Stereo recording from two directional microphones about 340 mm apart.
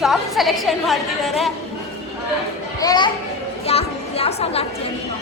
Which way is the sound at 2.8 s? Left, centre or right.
Centre.